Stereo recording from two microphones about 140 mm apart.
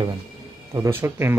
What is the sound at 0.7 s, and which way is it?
Speech, 20° right (ahead or behind).